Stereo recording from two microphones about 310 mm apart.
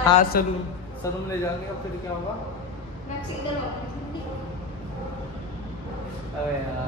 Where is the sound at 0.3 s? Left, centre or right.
Left.